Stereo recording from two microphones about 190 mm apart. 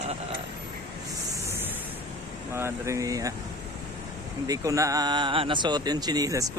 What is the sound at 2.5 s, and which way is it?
Speech, 15° right (ahead or behind).